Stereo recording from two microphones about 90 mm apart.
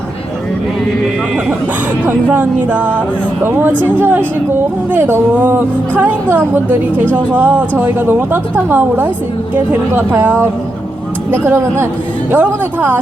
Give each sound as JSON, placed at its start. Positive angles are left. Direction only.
{"t": 2.0, "sound": "a woman's voice", "side_deg": -20}